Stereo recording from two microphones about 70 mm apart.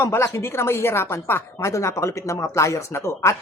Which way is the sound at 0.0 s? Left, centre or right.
Left.